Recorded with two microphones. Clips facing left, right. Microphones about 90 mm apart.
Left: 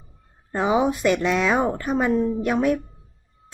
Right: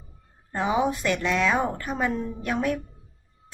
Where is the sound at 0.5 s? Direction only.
15° left (ahead or behind).